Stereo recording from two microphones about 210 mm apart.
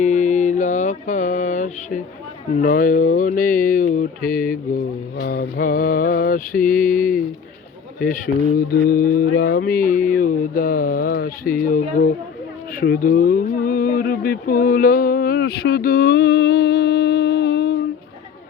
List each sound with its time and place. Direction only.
0.0 s music: 35° left (ahead or behind)
2.6 s speech: 40° left (ahead or behind)
5.2 s mantra: 45° left (ahead or behind)
7.9 s speech: 40° left (ahead or behind)
12.7 s a sound: 45° left (ahead or behind)